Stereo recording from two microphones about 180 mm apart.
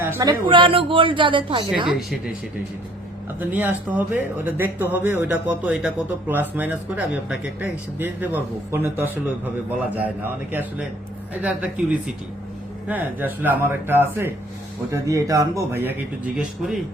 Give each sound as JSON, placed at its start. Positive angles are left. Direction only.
{"t": 0.0, "sound": "speech", "side_deg": -15}
{"t": 1.9, "sound": "speech", "side_deg": -5}
{"t": 3.5, "sound": "speech", "side_deg": -10}
{"t": 10.5, "sound": "speech", "side_deg": -10}